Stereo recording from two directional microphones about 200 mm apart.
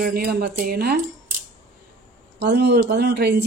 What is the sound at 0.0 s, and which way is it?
Speech, 50° right (ahead or behind).